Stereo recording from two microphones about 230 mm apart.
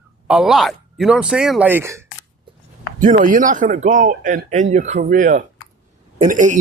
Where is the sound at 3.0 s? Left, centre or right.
Right.